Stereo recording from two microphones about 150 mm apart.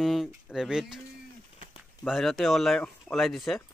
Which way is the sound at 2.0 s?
Centre (ahead or behind).